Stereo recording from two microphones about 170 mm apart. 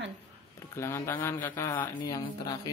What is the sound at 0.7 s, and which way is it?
Speech, 15° left (ahead or behind).